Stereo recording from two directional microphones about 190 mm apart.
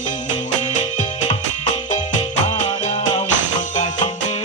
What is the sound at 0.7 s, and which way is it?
Music, 40° left (ahead or behind).